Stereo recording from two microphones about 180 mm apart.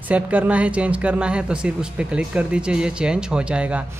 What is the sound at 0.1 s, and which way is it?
Speech, 5° right (ahead or behind).